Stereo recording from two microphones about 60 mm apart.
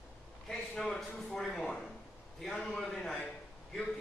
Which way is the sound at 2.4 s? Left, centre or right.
Centre.